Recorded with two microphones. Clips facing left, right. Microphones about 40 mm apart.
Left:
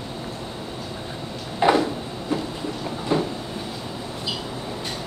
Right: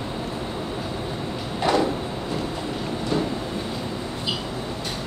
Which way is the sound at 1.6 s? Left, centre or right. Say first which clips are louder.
Left 4 dB; centre.